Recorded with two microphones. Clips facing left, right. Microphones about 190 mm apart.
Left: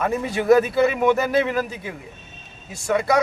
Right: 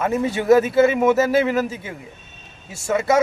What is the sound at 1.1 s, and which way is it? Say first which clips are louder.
Speech: right 3 dB; 25° right (ahead or behind).